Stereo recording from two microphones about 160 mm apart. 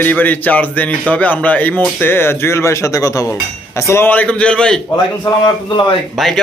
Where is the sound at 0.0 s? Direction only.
10° left (ahead or behind).